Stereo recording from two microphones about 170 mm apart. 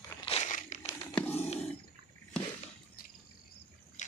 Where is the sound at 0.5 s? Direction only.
45° left (ahead or behind).